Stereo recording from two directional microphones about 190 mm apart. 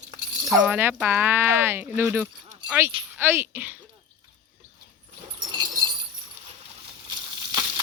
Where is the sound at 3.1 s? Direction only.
10° right (ahead or behind).